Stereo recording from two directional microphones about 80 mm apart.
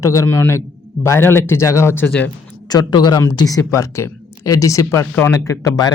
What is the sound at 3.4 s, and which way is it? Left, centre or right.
A man's voice, left.